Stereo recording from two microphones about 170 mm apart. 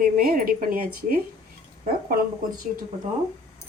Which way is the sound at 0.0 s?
60° right (ahead or behind).